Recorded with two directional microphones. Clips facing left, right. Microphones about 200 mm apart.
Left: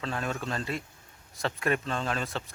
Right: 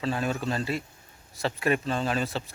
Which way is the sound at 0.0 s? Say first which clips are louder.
Right 5 dB; 5° right (ahead or behind).